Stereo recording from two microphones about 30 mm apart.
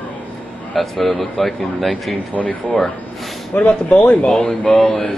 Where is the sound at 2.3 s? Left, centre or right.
Left.